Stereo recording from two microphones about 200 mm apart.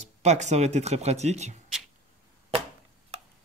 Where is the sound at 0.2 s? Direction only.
35° right (ahead or behind).